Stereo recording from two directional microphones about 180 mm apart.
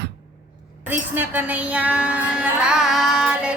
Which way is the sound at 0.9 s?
10° right (ahead or behind).